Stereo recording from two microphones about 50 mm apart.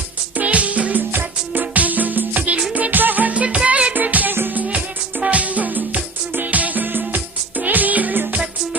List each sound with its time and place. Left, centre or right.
0.3 s music: right
3.9 s music: right
5.2 s music: right